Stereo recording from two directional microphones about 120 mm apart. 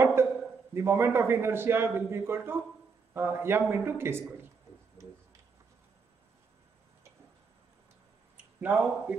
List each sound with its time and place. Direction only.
0.0 s a sound: 20° right (ahead or behind)
0.7 s a man's voice: 20° right (ahead or behind)
8.5 s speech: 15° right (ahead or behind)